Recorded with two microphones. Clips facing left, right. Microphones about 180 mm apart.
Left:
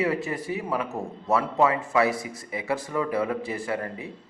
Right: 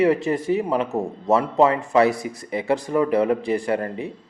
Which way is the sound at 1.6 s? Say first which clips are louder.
Right 5 dB; 35° right (ahead or behind).